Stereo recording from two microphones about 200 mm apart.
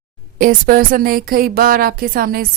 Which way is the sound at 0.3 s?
45° right (ahead or behind).